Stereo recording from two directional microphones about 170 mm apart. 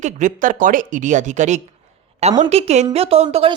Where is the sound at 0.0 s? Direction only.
45° right (ahead or behind).